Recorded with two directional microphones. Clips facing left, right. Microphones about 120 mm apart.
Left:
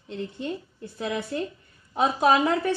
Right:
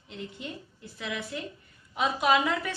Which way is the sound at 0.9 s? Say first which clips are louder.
Left 6 dB; 35° left (ahead or behind).